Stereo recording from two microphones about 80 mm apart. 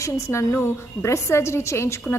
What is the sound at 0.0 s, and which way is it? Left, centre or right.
A woman's voice, left.